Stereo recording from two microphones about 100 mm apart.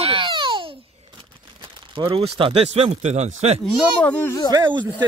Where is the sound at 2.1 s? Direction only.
60° right (ahead or behind); by 3.6 s 90° right.